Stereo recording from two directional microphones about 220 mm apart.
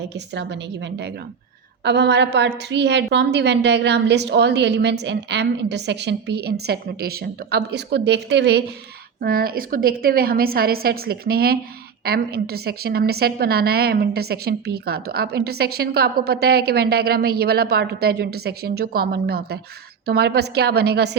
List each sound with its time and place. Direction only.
0.3 s a woman's voice: 55° right (ahead or behind)